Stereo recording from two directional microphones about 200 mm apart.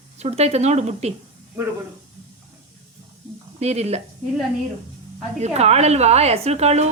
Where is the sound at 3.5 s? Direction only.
30° right (ahead or behind).